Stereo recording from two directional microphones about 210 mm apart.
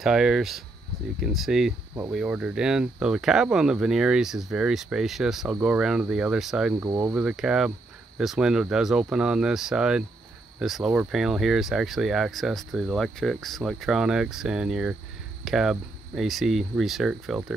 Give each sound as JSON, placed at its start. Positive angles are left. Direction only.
{"t": 0.0, "sound": "speech", "side_deg": 0}